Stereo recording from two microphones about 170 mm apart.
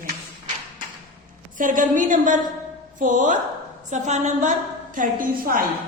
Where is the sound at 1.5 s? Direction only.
50° right (ahead or behind).